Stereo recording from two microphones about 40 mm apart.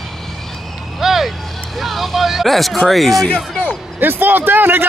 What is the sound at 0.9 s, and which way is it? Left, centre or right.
Vehicle, centre.